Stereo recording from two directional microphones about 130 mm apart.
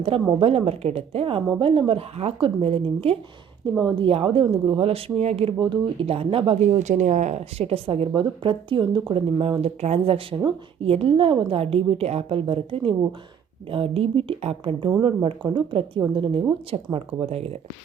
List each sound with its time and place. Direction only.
0.3 s speech: 50° right (ahead or behind)
6.6 s speech: 65° right (ahead or behind)